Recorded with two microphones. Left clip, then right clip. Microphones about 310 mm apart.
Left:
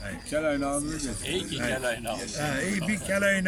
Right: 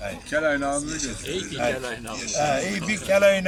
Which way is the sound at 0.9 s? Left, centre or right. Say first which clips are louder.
Right 2 dB; left.